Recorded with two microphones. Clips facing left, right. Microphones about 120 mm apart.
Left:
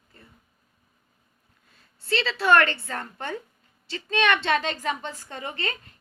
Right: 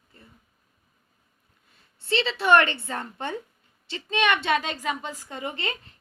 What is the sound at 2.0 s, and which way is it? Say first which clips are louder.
A woman's voice: even; 20° right (ahead or behind).